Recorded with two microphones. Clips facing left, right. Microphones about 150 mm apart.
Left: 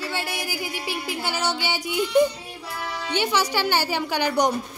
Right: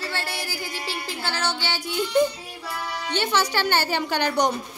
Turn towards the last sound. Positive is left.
turn(degrees=10)  # may be behind; listen again after turning